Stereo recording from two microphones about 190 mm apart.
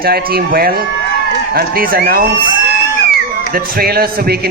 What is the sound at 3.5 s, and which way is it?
Speech, 55° right (ahead or behind).